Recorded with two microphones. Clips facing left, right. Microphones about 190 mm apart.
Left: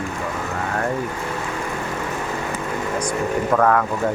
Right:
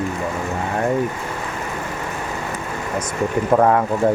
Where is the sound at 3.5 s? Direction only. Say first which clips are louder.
Right 3 dB; 25° right (ahead or behind).